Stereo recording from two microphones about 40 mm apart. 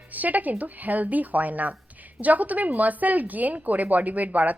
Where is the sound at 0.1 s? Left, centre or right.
Right.